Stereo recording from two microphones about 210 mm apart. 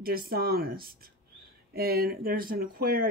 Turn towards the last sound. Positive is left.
turn(degrees=-45)  # may be behind; listen again after turning